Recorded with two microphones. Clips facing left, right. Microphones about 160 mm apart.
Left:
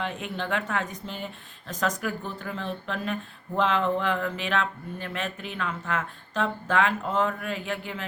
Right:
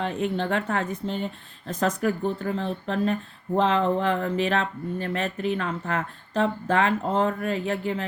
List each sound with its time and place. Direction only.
0.0 s speech: 35° right (ahead or behind)